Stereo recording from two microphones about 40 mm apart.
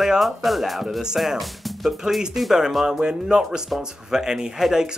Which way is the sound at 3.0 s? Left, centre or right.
Centre.